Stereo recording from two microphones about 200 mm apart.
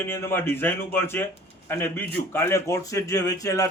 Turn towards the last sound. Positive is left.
turn(degrees=15)  # may be behind; listen again after turning